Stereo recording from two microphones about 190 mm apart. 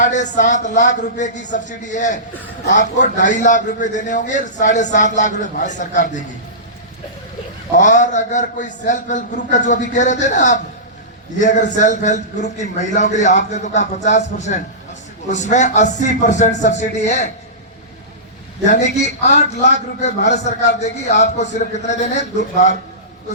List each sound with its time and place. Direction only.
0.0 s a man's voice: 40° left (ahead or behind)
7.8 s a man's voice: 40° left (ahead or behind)
18.7 s a man's voice: 40° left (ahead or behind)